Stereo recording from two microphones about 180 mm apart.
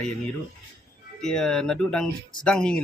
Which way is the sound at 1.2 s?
5° left (ahead or behind).